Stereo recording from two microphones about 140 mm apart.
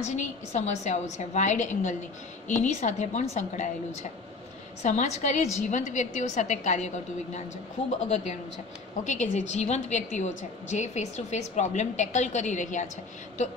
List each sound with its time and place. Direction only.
0.0 s a woman's voice: 60° left (ahead or behind)
4.8 s a woman's voice: 55° left (ahead or behind)
8.1 s a woman's voice: 55° left (ahead or behind)